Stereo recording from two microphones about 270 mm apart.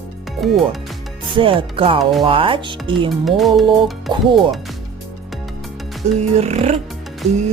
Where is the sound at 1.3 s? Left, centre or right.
Centre.